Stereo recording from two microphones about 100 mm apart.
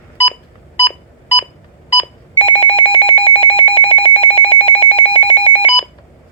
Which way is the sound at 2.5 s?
70° left (ahead or behind).